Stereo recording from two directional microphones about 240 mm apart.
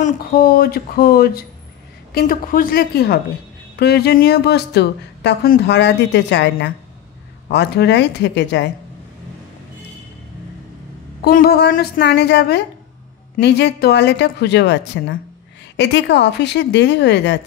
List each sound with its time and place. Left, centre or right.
0.0 s a woman's voice: left
11.2 s a woman's voice: left